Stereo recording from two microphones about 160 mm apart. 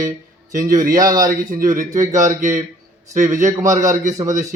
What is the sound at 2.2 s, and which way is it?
Speech, 50° right (ahead or behind).